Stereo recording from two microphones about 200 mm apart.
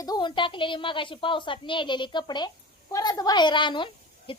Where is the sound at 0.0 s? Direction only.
20° left (ahead or behind).